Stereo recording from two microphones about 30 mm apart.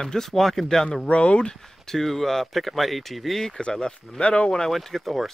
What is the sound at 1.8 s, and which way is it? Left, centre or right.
Speech, centre.